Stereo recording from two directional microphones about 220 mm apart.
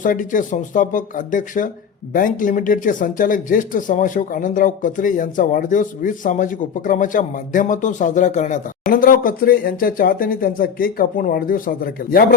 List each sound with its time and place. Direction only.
0.0 s speech: 35° left (ahead or behind)